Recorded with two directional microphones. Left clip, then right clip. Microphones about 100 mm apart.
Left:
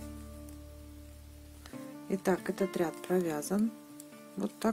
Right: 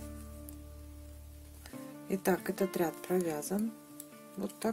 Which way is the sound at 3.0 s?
30° left (ahead or behind).